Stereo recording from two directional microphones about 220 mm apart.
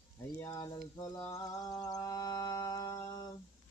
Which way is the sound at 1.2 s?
15° left (ahead or behind).